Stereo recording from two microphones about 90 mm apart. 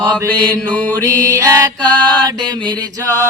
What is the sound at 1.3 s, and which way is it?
Mantra, 35° right (ahead or behind).